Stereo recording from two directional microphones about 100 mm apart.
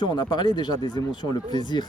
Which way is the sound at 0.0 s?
45° left (ahead or behind).